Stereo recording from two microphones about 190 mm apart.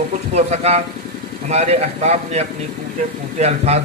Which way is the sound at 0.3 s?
35° right (ahead or behind).